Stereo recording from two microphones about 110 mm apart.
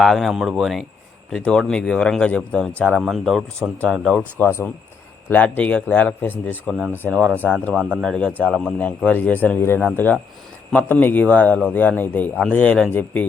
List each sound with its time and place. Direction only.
0.0 s speech: centre (ahead or behind)
4.4 s speech: 20° left (ahead or behind)
7.7 s speech: 10° right (ahead or behind)
8.0 s speech: 5° left (ahead or behind)